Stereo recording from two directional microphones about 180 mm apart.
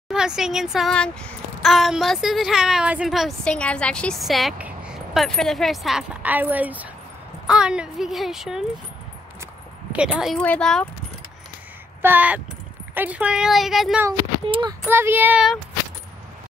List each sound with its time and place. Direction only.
0.1 s a child's voice: 5° right (ahead or behind)
9.9 s a child's voice: 5° right (ahead or behind)
12.0 s a child's voice: 10° right (ahead or behind)
14.4 s speech: 25° right (ahead or behind)
14.9 s speech: 10° right (ahead or behind)